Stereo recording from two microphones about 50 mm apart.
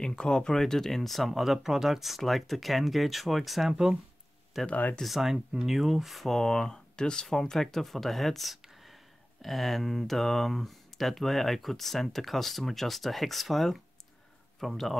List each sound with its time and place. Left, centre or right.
0.0 s speech: centre
4.6 s speech: left
5.0 s speech: centre